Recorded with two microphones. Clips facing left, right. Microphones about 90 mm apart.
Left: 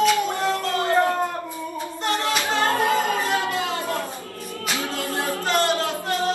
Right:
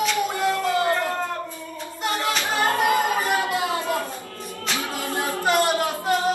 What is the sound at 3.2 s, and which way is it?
Music, 15° right (ahead or behind).